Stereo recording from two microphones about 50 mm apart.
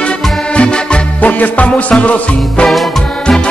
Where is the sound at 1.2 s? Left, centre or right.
Left.